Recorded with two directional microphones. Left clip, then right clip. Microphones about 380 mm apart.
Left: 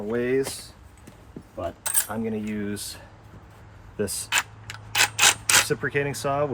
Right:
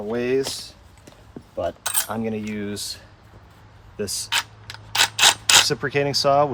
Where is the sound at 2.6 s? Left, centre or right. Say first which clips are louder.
Right 3 dB; centre.